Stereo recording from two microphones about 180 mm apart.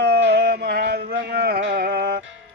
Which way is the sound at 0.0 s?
65° right (ahead or behind).